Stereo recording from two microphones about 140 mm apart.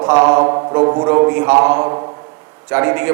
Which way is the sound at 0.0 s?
20° right (ahead or behind).